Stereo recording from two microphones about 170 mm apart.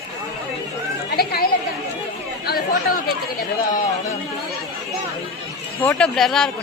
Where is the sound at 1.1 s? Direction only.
65° left (ahead or behind).